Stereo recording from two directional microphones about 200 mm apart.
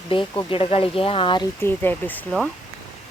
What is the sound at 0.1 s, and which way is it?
Speech, 25° left (ahead or behind).